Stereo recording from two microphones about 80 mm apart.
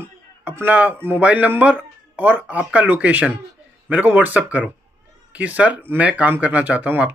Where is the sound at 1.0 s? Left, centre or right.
Right.